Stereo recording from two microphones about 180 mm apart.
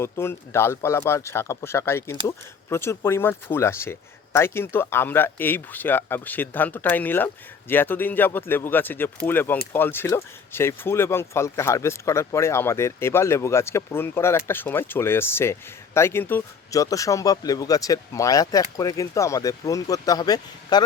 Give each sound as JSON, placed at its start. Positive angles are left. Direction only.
{"t": 0.0, "sound": "speech", "side_deg": 15}